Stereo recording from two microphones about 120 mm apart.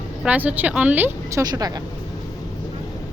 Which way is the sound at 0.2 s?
10° right (ahead or behind).